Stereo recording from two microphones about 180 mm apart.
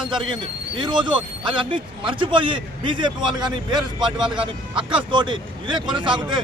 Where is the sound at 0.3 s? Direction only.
25° right (ahead or behind).